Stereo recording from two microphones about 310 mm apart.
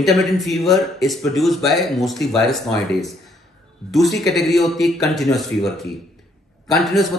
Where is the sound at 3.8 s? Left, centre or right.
Centre.